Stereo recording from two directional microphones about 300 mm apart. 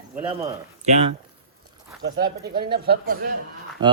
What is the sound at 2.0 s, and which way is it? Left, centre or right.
Speech, right.